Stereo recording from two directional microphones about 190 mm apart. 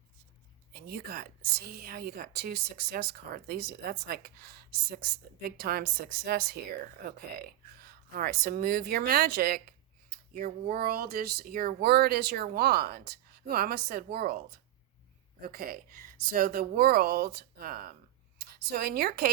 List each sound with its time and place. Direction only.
0.7 s a woman's voice: 55° right (ahead or behind)
5.4 s a woman's voice: 55° right (ahead or behind)
8.1 s a woman's voice: 55° right (ahead or behind)
15.4 s a woman's voice: 50° right (ahead or behind)